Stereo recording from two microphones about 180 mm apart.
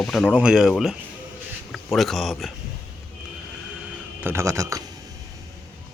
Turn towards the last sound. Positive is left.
turn(degrees=-15)  # may be behind; listen again after turning